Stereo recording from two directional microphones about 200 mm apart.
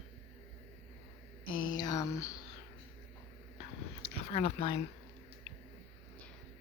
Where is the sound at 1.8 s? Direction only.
20° left (ahead or behind).